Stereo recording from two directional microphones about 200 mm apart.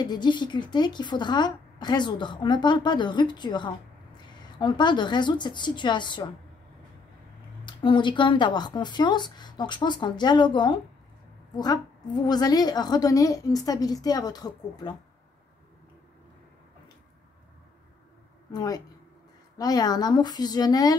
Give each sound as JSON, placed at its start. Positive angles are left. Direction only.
{"t": 0.0, "sound": "a woman's voice", "side_deg": 20}
{"t": 7.6, "sound": "a woman's voice", "side_deg": 25}
{"t": 18.5, "sound": "a woman's voice", "side_deg": 20}